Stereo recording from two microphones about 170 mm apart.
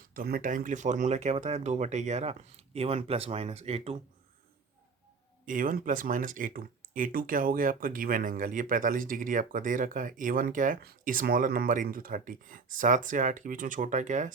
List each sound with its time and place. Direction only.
0.1 s speech: 60° right (ahead or behind); by 3.9 s 35° right (ahead or behind)
5.5 s speech: 55° right (ahead or behind)